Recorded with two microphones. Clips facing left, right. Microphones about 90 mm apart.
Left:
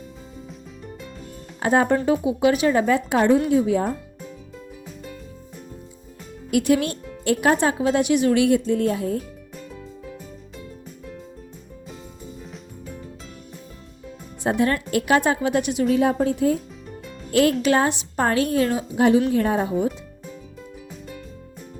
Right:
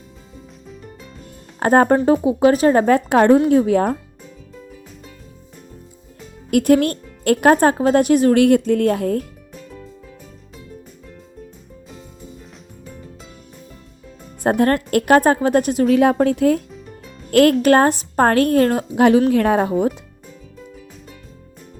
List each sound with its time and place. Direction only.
1.5 s speech: 50° right (ahead or behind)
2.1 s speech: 35° right (ahead or behind); by 3.9 s 60° right (ahead or behind)
6.5 s speech: 50° right (ahead or behind)
9.6 s music: 5° left (ahead or behind)
14.4 s speech: 50° right (ahead or behind)
16.0 s a woman's voice: 75° right (ahead or behind)
17.3 s a woman's voice: 55° right (ahead or behind)